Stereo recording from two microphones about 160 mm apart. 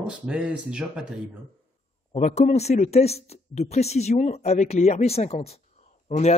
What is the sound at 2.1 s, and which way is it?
A man's voice, 45° left (ahead or behind).